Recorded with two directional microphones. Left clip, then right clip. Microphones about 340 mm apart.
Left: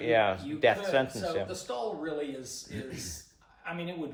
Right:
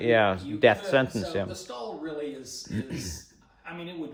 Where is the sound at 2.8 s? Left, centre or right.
Right.